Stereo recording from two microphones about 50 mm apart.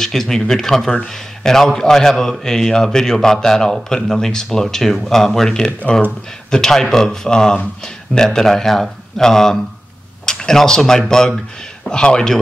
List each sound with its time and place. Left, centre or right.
0.0 s a man's voice: centre